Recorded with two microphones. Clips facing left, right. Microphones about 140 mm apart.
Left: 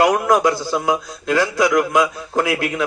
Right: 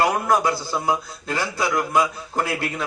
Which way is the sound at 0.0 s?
90° left.